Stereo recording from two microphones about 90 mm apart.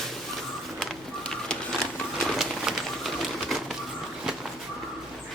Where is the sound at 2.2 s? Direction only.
5° right (ahead or behind).